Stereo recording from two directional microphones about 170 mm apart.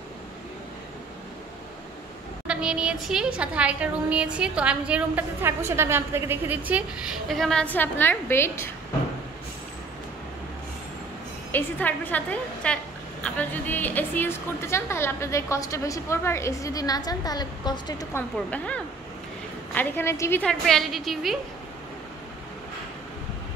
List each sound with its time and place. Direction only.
2.4 s a woman's voice: 5° right (ahead or behind)
7.2 s a woman's voice: centre (ahead or behind)
11.5 s a woman's voice: 10° left (ahead or behind)
19.7 s a woman's voice: 10° left (ahead or behind)